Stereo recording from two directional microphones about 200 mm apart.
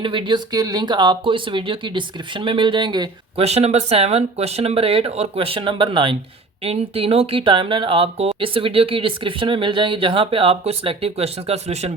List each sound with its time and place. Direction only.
0.0 s speech: 25° right (ahead or behind)